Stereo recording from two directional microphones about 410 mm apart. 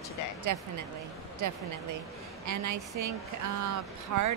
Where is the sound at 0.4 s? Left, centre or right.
Right.